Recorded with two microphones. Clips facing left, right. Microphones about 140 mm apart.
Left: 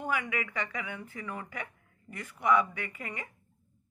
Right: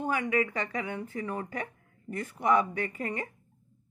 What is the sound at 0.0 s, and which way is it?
Speech, 30° right (ahead or behind).